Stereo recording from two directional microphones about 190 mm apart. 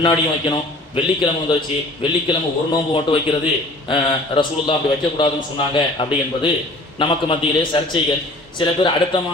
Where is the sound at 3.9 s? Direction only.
25° left (ahead or behind).